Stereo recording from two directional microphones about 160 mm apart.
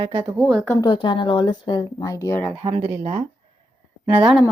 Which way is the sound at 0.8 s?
30° left (ahead or behind).